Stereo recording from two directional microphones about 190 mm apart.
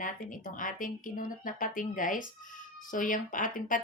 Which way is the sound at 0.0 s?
45° left (ahead or behind).